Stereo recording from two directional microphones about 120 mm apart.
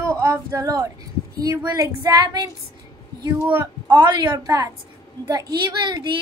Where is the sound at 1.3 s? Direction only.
30° right (ahead or behind).